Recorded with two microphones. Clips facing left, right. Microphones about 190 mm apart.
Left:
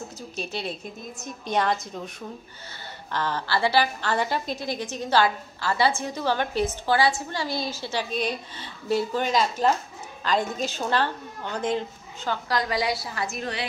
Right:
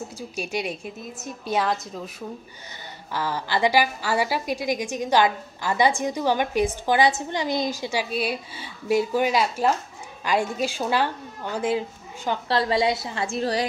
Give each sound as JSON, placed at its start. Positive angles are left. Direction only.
{"t": 0.4, "sound": "a woman's voice", "side_deg": -10}
{"t": 12.4, "sound": "a woman's voice", "side_deg": -30}